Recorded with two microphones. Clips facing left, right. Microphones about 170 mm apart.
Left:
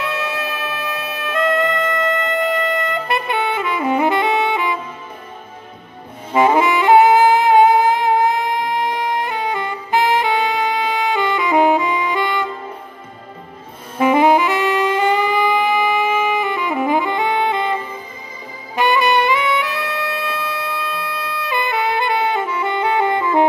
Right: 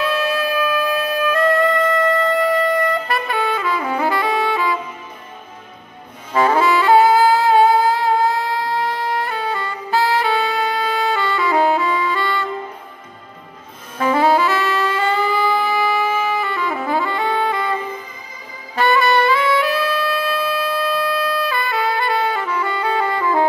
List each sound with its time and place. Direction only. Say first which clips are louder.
0.0 s music: right 4 dB; 20° left (ahead or behind)
2.9 s saxophone: even; 20° left (ahead or behind)
6.3 s saxophone: left 1 dB; 20° left (ahead or behind)
13.9 s saxophone: left 2 dB; 15° left (ahead or behind)
18.8 s music: even; 15° left (ahead or behind)